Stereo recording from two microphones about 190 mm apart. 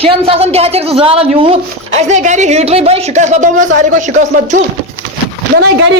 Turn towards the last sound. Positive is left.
turn(degrees=-60)  # may be behind; listen again after turning